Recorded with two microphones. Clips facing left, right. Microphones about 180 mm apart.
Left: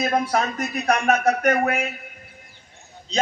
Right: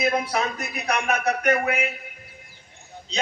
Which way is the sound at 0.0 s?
45° left (ahead or behind).